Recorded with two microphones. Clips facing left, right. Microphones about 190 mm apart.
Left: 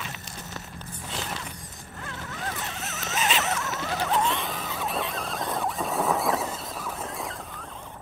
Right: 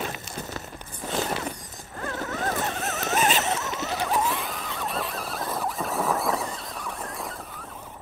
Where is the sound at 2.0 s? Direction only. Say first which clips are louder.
Right 7 dB; 50° right (ahead or behind).